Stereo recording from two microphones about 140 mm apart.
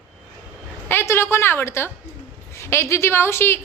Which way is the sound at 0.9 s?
15° left (ahead or behind).